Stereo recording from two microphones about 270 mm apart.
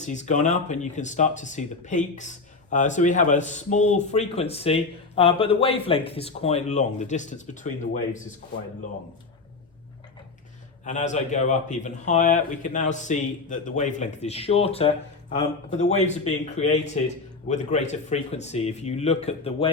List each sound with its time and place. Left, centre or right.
0.0 s speech: left
10.8 s speech: left